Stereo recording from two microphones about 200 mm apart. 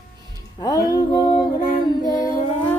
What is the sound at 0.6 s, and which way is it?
Music, 20° left (ahead or behind).